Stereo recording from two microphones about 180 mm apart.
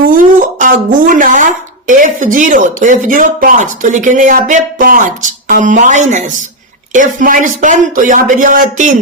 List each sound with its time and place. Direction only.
0.0 s speech: 50° right (ahead or behind)